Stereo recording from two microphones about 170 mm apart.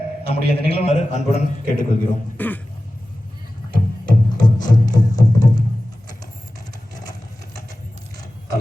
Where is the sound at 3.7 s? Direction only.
25° left (ahead or behind).